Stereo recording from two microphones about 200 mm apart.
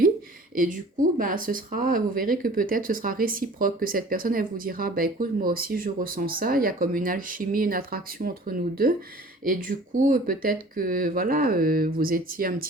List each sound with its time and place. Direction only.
0.5 s speech: 45° right (ahead or behind)